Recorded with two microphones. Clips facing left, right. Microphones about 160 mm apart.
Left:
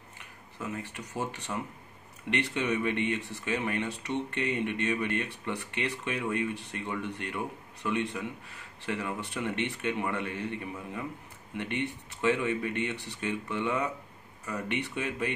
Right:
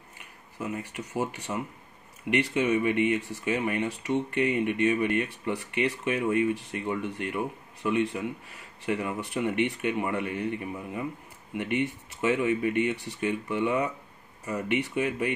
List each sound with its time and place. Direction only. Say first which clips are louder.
0.6 s speech: right 4 dB; 15° right (ahead or behind)
11.5 s speech: right 5 dB; 15° right (ahead or behind)